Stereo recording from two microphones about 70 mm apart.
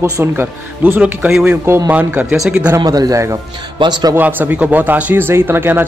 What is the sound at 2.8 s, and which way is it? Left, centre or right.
Speech, right.